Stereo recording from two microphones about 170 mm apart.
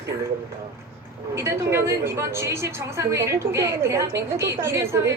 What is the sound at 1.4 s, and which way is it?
A woman's voice, 15° right (ahead or behind).